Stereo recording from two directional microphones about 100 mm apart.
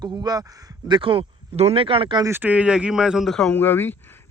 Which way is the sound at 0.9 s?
60° right (ahead or behind).